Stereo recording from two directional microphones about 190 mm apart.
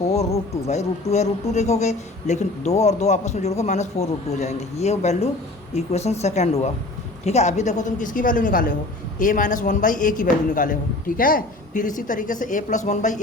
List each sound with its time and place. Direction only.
0.7 s a man's voice: 35° left (ahead or behind)